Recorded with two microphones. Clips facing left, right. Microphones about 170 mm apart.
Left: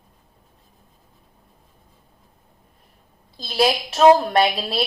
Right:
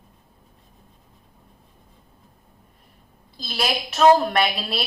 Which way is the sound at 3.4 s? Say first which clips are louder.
Left 6 dB; 30° left (ahead or behind).